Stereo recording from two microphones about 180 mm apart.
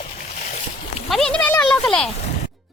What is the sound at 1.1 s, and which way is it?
Speech, 5° left (ahead or behind).